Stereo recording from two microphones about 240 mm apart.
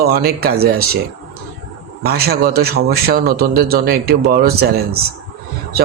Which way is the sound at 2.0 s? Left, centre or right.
Right.